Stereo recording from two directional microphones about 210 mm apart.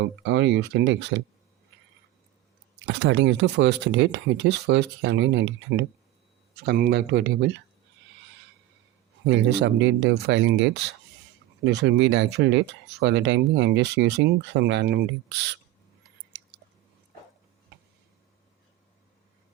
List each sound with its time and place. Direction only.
0.0 s speech: 60° right (ahead or behind)
2.7 s speech: 55° right (ahead or behind)
6.6 s speech: 45° right (ahead or behind)
9.2 s speech: 55° right (ahead or behind)